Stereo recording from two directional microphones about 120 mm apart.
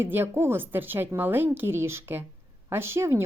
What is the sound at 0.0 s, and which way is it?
A woman's voice, 20° right (ahead or behind).